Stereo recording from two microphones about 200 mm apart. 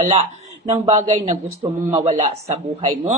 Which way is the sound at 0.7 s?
35° right (ahead or behind).